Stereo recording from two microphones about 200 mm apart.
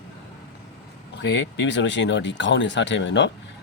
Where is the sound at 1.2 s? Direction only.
65° left (ahead or behind).